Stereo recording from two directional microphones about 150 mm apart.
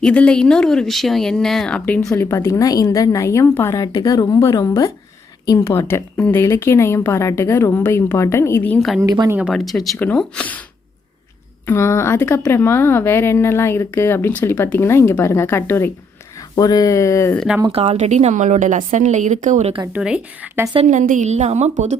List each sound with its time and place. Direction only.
0.0 s a woman's voice: 10° left (ahead or behind)
9.0 s a woman's voice: 25° right (ahead or behind)
9.4 s a woman's voice: centre (ahead or behind)
11.6 s a woman's voice: 15° left (ahead or behind)
17.3 s speech: centre (ahead or behind)
17.7 s a woman's voice: 45° right (ahead or behind)
19.9 s a woman's voice: 5° right (ahead or behind)
20.7 s a woman's voice: 50° right (ahead or behind)